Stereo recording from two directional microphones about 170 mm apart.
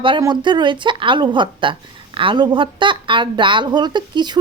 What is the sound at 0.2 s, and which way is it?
Speech, 25° right (ahead or behind).